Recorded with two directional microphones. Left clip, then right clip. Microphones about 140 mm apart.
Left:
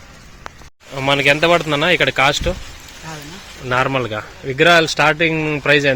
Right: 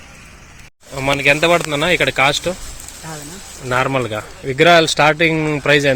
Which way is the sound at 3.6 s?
10° right (ahead or behind).